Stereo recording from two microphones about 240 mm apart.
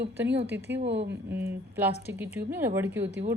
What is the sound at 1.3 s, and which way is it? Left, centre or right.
A woman's voice, centre.